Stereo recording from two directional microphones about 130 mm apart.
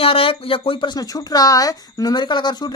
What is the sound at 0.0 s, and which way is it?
Speech, 45° left (ahead or behind).